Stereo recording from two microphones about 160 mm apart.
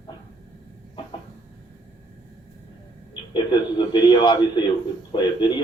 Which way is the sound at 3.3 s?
30° left (ahead or behind).